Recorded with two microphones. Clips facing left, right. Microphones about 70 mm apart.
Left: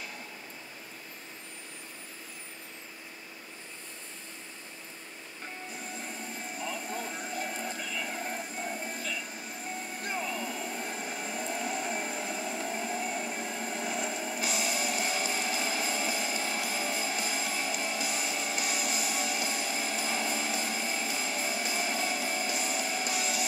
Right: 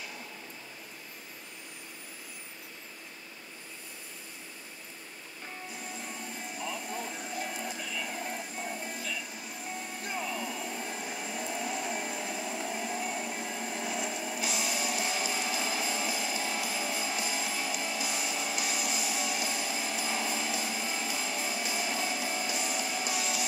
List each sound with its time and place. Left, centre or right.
6.6 s vehicle: left
7.8 s music: left
10.0 s a sound: left